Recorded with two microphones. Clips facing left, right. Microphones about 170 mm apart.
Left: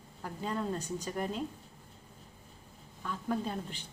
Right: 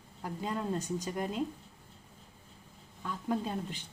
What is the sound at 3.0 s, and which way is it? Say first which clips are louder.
Speech: right 1 dB; 15° right (ahead or behind).